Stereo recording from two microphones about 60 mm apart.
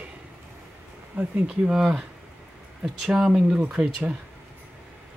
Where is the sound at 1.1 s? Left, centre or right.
Right.